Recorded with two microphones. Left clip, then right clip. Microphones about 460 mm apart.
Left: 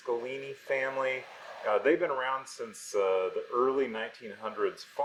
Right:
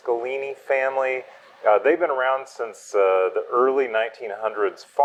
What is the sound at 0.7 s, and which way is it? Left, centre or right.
Speech, right.